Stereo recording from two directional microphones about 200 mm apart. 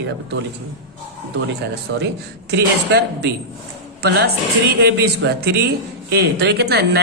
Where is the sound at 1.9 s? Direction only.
65° right (ahead or behind).